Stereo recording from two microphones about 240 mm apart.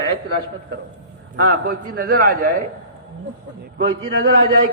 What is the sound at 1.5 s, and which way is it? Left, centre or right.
A man's voice, right.